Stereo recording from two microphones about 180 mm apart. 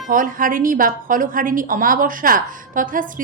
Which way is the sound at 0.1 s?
50° right (ahead or behind).